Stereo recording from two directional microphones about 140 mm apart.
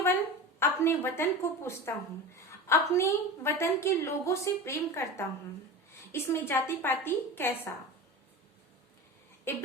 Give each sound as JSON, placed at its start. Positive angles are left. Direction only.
{"t": 0.6, "sound": "a woman's voice", "side_deg": 20}
{"t": 9.4, "sound": "speech", "side_deg": 15}